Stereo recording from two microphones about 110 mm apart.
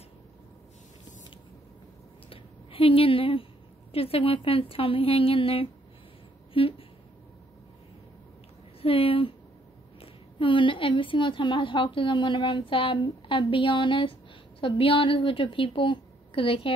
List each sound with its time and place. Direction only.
2.2 s a sound: 55° left (ahead or behind)
3.9 s a woman's voice: 60° left (ahead or behind)
8.8 s a woman's voice: 55° left (ahead or behind)
10.4 s a woman's voice: 50° left (ahead or behind)